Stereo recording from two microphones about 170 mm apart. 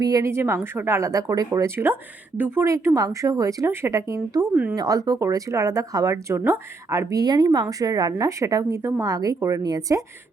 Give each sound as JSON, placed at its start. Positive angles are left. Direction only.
{"t": 0.0, "sound": "speech", "side_deg": -20}